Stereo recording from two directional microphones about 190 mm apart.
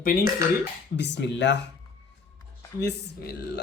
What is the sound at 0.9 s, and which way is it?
Speech, 65° left (ahead or behind).